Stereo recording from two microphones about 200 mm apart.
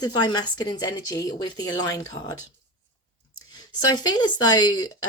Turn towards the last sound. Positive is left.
turn(degrees=20)  # may be behind; listen again after turning